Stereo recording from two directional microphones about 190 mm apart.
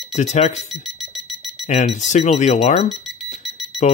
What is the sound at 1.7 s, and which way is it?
Speech, 35° left (ahead or behind).